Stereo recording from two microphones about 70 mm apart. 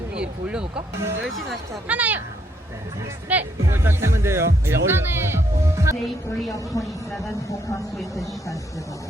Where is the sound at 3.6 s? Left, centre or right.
Right.